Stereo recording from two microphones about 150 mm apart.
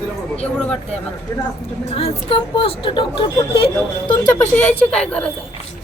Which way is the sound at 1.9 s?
40° left (ahead or behind).